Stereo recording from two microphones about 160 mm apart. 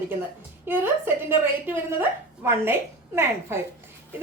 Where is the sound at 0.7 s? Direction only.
15° right (ahead or behind).